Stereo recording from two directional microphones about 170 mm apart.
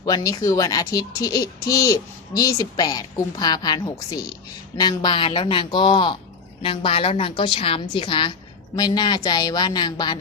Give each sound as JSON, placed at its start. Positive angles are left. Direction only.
{"t": 0.0, "sound": "speech", "side_deg": 20}